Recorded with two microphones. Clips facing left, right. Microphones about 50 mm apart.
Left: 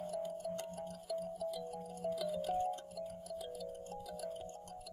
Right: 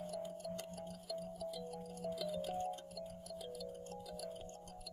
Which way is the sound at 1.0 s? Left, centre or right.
Centre.